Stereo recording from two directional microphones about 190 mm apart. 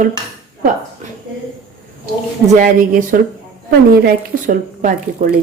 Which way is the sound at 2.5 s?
45° right (ahead or behind).